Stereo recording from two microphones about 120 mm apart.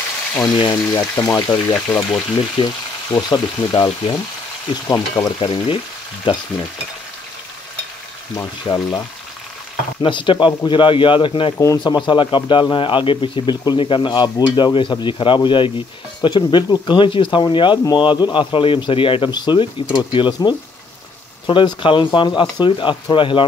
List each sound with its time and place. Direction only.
0.4 s a man's voice: 40° left (ahead or behind)
4.8 s speech: 20° left (ahead or behind)
5.2 s a man's voice: 40° left (ahead or behind)
8.4 s a man's voice: 30° left (ahead or behind)
10.0 s speech: 40° left (ahead or behind)
11.5 s speech: 25° left (ahead or behind)
11.8 s a man's voice: 40° left (ahead or behind)